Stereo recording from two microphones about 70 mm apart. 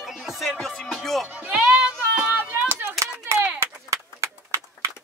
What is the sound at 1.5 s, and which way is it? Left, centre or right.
Child singing, centre.